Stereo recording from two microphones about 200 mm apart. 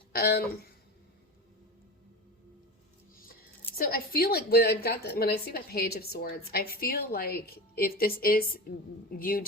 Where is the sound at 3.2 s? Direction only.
45° left (ahead or behind).